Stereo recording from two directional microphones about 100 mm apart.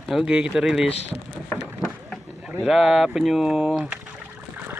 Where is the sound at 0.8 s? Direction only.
90° left.